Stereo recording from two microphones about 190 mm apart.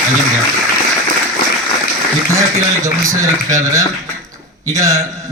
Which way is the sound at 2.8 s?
15° right (ahead or behind).